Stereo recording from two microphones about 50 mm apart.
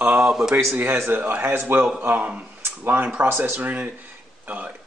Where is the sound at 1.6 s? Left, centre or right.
Right.